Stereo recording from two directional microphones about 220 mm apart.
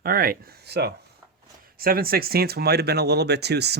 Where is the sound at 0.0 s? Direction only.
40° right (ahead or behind).